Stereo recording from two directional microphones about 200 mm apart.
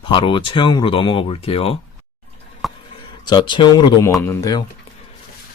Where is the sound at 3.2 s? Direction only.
20° left (ahead or behind).